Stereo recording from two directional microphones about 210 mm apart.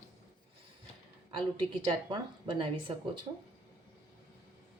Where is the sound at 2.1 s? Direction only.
25° right (ahead or behind).